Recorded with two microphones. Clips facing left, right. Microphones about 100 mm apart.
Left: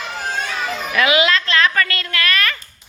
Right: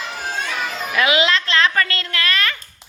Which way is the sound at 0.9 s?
25° right (ahead or behind).